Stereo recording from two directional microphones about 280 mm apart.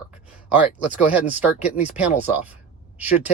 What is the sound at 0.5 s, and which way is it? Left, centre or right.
Speech, centre.